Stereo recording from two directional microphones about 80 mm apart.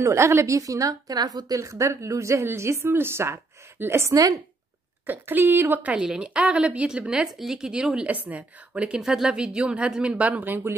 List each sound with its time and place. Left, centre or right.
0.0 s a woman's voice: right
1.6 s a woman's voice: right
4.1 s a woman's voice: right
5.0 s a woman's voice: right